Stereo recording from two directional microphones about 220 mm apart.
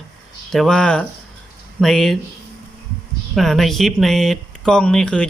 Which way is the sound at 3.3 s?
Centre (ahead or behind).